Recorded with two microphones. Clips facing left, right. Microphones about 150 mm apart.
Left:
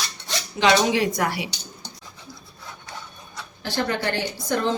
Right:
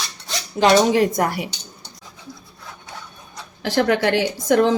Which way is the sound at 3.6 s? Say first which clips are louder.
Right 7 dB; 85° right.